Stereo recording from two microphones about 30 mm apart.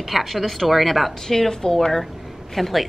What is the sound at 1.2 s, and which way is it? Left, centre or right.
Speech, centre.